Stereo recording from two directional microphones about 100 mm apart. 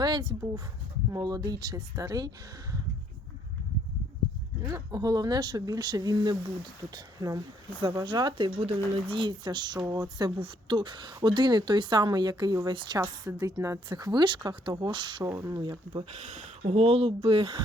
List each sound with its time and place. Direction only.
0.0 s speech: 45° right (ahead or behind)
4.6 s speech: 35° right (ahead or behind)
10.3 s speech: 60° right (ahead or behind)
13.0 s speech: 35° right (ahead or behind)
13.9 s speech: 45° right (ahead or behind)
16.6 s speech: 90° right; by 17.6 s 60° right (ahead or behind)